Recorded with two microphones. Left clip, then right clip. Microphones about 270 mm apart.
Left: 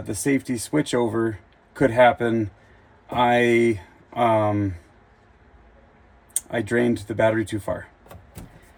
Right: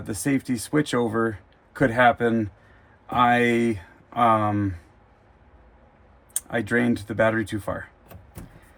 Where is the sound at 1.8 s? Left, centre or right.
Right.